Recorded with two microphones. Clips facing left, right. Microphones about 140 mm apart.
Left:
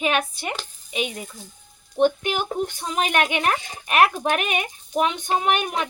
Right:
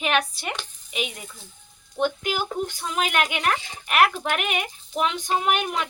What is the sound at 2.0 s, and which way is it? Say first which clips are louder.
Speech: left 5 dB; 25° left (ahead or behind).